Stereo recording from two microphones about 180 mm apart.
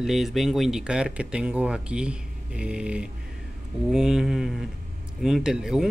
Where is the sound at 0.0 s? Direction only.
Centre (ahead or behind).